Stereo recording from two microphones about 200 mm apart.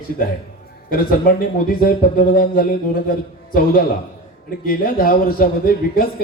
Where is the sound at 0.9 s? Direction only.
45° left (ahead or behind).